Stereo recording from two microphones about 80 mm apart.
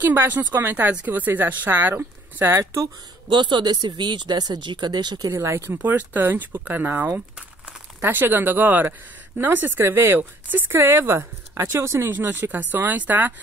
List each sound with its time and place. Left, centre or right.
0.0 s speech: right
2.6 s a woman's voice: right
3.3 s speech: right
5.3 s a woman's voice: right
5.9 s a woman's voice: right
12.1 s speech: right